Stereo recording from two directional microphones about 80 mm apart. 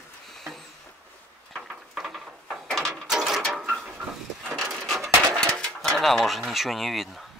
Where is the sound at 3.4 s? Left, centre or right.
Centre.